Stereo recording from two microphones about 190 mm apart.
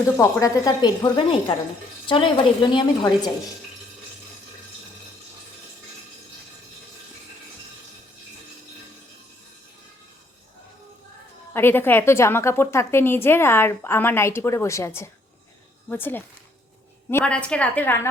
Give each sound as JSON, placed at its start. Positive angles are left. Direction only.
{"t": 0.2, "sound": "a woman's voice", "side_deg": 15}
{"t": 11.5, "sound": "a woman's voice", "side_deg": 10}